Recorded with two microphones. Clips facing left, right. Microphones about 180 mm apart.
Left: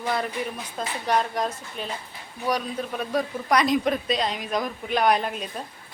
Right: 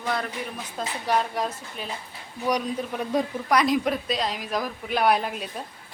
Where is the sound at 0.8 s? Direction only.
5° right (ahead or behind).